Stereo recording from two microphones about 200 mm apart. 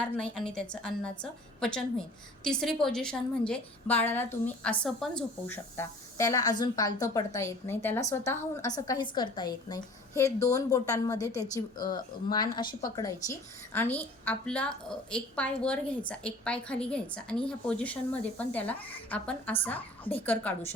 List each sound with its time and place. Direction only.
0.0 s a woman's voice: 5° left (ahead or behind)